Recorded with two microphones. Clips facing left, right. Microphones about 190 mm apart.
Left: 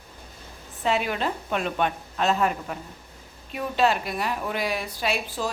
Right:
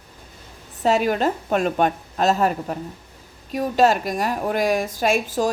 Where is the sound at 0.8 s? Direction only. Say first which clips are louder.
Right 6 dB; 40° right (ahead or behind).